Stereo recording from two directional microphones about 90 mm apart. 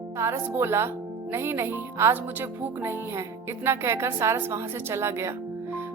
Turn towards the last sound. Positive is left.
turn(degrees=-30)  # may be behind; listen again after turning